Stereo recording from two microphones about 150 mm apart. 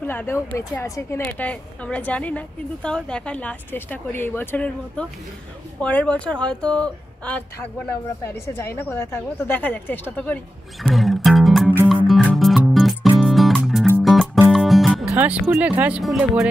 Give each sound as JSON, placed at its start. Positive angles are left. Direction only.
{"t": 0.0, "sound": "speech", "side_deg": 15}
{"t": 1.2, "sound": "speech", "side_deg": 10}
{"t": 10.8, "sound": "music", "side_deg": 0}
{"t": 15.0, "sound": "speech", "side_deg": -10}